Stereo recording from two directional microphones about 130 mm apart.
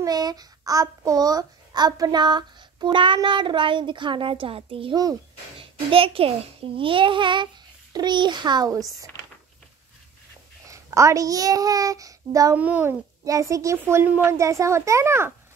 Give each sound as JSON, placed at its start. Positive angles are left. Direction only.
{"t": 0.0, "sound": "a child's voice", "side_deg": -30}
{"t": 10.7, "sound": "a child's voice", "side_deg": -25}
{"t": 12.5, "sound": "a child's voice", "side_deg": -10}
{"t": 13.2, "sound": "a child's voice", "side_deg": -25}